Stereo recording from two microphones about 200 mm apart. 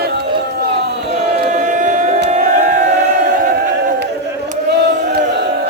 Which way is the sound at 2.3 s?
40° right (ahead or behind).